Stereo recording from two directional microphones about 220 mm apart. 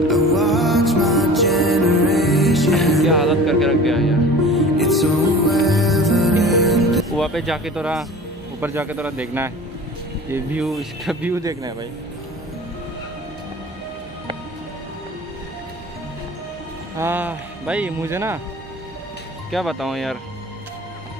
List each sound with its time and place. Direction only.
0.1 s music: centre (ahead or behind)
8.5 s speech: 10° right (ahead or behind)
16.9 s speech: 10° right (ahead or behind)
19.5 s speech: centre (ahead or behind)